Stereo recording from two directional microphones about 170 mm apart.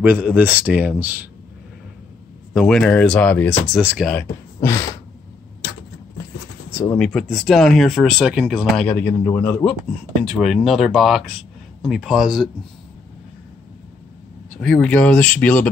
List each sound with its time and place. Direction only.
0.0 s a man's voice: 10° right (ahead or behind)
2.5 s speech: 5° left (ahead or behind)
6.7 s a sound: 20° left (ahead or behind)
7.0 s speech: centre (ahead or behind)
8.8 s speech: 10° left (ahead or behind)
9.8 s speech: 5° right (ahead or behind)
14.6 s speech: 5° left (ahead or behind)